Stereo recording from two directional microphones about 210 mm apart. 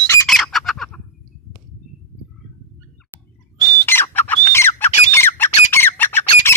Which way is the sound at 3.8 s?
10° left (ahead or behind).